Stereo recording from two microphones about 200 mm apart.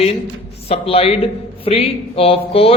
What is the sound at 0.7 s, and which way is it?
A man's voice, 30° left (ahead or behind).